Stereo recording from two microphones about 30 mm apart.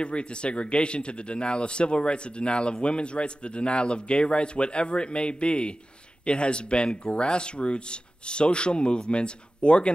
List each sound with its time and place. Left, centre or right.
0.0 s speech: left